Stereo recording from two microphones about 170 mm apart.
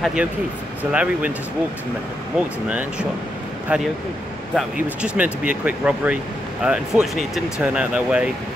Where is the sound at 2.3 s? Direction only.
5° right (ahead or behind).